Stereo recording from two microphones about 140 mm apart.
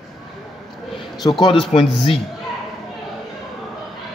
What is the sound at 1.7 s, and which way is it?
Speech, 50° left (ahead or behind).